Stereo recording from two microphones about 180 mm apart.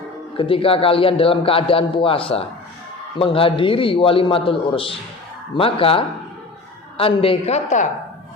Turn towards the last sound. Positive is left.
turn(degrees=40)  # may be behind; listen again after turning